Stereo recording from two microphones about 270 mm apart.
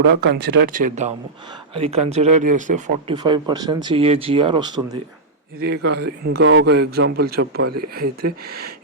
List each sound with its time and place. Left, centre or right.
0.1 s a man's voice: right; by 4.9 s centre
5.8 s speech: right
6.2 s a man's voice: right